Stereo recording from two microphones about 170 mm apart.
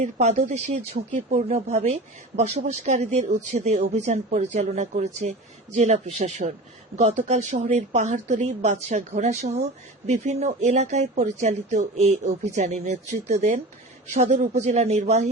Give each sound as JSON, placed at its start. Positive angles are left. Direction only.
{"t": 0.0, "sound": "speech", "side_deg": -45}